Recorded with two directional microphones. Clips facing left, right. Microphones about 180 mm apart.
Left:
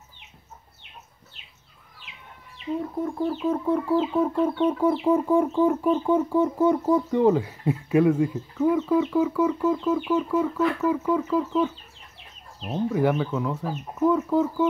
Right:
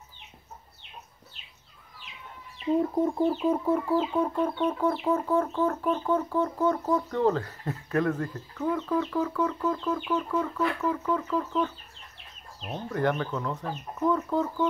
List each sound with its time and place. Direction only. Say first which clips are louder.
3.0 s music: right 2 dB; 20° right (ahead or behind)
3.3 s music: left 1 dB; 5° right (ahead or behind); by 11.7 s 10° left (ahead or behind)
12.7 s music: left 5 dB; 5° left (ahead or behind)